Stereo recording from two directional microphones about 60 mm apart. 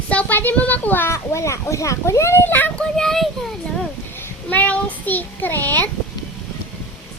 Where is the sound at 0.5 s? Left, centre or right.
Left.